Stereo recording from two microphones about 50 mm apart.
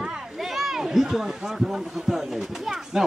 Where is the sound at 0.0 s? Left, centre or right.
Centre.